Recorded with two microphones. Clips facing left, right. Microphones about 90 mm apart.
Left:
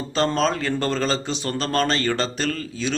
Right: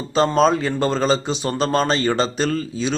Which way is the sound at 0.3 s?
15° right (ahead or behind).